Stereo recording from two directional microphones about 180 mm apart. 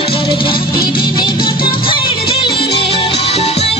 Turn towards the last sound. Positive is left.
turn(degrees=35)  # may be behind; listen again after turning